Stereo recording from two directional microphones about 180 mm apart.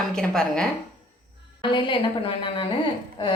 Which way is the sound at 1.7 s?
25° left (ahead or behind).